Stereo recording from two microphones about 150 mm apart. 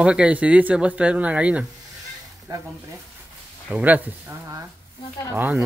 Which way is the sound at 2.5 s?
25° right (ahead or behind).